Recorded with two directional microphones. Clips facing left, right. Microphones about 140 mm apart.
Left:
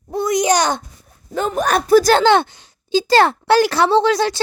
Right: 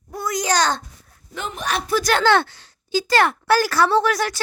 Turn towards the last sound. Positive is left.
turn(degrees=25)  # may be behind; listen again after turning